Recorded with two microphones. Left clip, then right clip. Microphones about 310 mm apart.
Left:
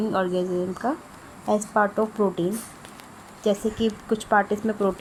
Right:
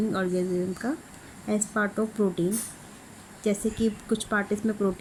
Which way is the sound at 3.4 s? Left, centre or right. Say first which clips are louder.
Left 4 dB; centre.